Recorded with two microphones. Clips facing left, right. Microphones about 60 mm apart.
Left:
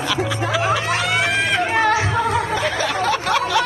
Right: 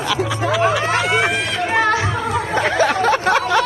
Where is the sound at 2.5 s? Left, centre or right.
Right.